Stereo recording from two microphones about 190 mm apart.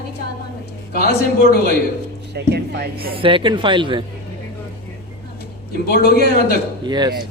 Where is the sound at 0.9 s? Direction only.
55° left (ahead or behind).